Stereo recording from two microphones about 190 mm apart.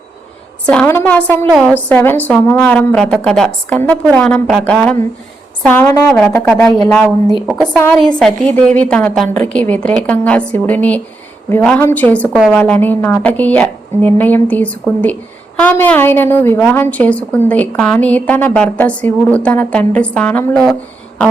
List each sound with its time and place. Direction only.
0.7 s a woman's voice: 10° left (ahead or behind)